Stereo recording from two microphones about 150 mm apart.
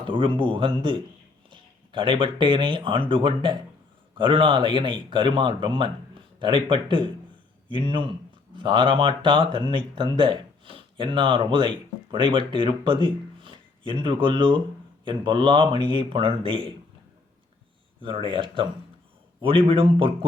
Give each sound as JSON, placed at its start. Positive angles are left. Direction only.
{"t": 0.0, "sound": "speech", "side_deg": -35}
{"t": 18.3, "sound": "speech", "side_deg": -35}